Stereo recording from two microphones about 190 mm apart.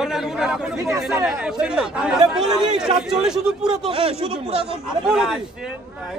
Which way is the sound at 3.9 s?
30° right (ahead or behind).